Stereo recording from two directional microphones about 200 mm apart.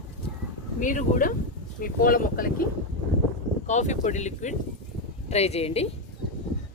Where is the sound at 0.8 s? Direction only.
40° left (ahead or behind).